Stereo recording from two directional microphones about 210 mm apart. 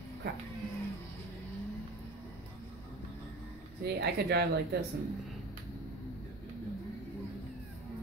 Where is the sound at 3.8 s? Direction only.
50° right (ahead or behind).